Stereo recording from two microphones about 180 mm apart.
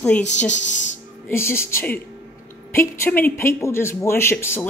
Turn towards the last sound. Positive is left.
turn(degrees=15)  # may be behind; listen again after turning